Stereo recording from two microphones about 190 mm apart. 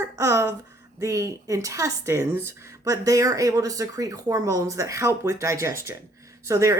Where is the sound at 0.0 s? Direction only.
15° right (ahead or behind).